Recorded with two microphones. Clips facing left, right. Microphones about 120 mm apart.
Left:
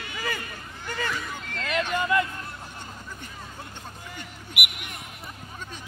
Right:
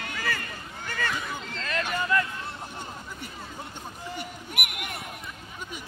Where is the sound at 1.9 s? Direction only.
20° left (ahead or behind).